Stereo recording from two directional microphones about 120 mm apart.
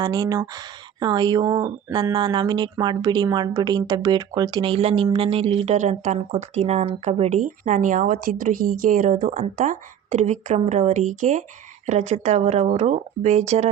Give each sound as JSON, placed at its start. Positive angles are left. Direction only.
{"t": 0.0, "sound": "speech", "side_deg": -30}
{"t": 4.7, "sound": "speech", "side_deg": -50}
{"t": 5.7, "sound": "speech", "side_deg": -80}
{"t": 11.9, "sound": "speech", "side_deg": -65}